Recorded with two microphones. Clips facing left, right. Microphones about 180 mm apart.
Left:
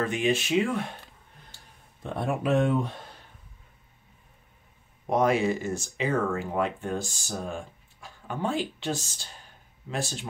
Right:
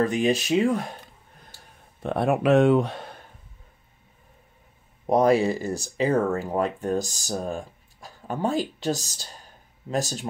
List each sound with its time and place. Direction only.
0.0 s speech: 40° right (ahead or behind)
2.0 s speech: 70° right (ahead or behind)
5.1 s speech: 35° right (ahead or behind)